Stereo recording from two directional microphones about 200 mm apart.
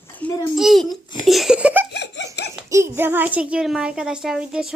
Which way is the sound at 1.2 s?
Centre (ahead or behind).